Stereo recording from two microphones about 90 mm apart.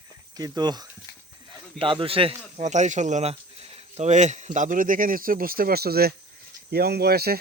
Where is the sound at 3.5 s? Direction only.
90° right.